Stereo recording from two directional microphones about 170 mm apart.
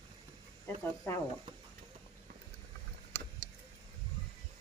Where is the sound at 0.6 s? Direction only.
15° left (ahead or behind).